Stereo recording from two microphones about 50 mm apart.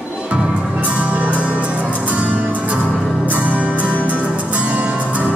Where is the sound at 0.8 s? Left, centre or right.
Right.